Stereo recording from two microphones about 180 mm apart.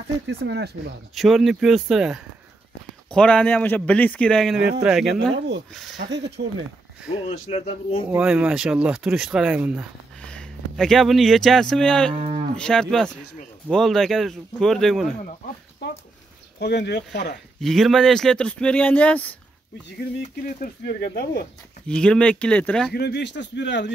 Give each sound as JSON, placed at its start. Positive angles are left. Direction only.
{"t": 0.3, "sound": "speech", "side_deg": -70}
{"t": 1.1, "sound": "speech", "side_deg": 0}
{"t": 5.9, "sound": "speech", "side_deg": -75}
{"t": 7.2, "sound": "speech", "side_deg": 35}
{"t": 8.1, "sound": "speech", "side_deg": -10}
{"t": 10.2, "sound": "speech", "side_deg": 5}
{"t": 12.1, "sound": "moo", "side_deg": -35}
{"t": 12.5, "sound": "speech", "side_deg": 5}
{"t": 16.5, "sound": "speech", "side_deg": 70}
{"t": 17.6, "sound": "speech", "side_deg": 0}
{"t": 20.4, "sound": "speech", "side_deg": 55}
{"t": 21.8, "sound": "speech", "side_deg": 5}
{"t": 22.9, "sound": "speech", "side_deg": 65}